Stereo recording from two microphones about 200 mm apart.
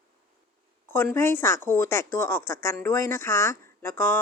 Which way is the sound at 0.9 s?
10° left (ahead or behind).